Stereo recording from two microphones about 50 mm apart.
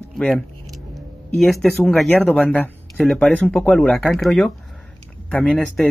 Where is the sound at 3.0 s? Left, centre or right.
Centre.